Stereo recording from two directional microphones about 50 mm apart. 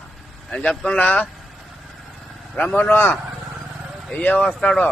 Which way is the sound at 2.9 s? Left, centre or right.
Left.